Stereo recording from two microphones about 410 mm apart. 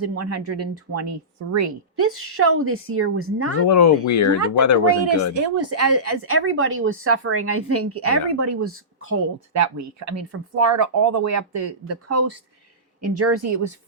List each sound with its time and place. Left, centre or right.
0.0 s a woman's voice: right
3.7 s speech: left
5.5 s a woman's voice: right